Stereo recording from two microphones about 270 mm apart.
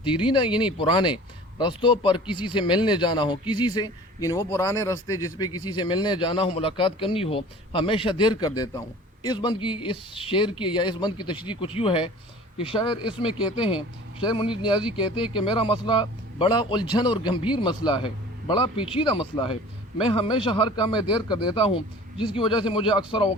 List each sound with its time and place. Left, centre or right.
0.0 s speech: centre